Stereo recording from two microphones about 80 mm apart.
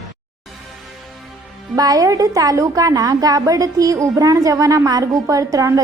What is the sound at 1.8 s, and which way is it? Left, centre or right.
A woman's voice, right.